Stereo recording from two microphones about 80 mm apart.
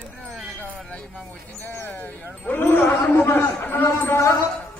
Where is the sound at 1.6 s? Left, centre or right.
Left.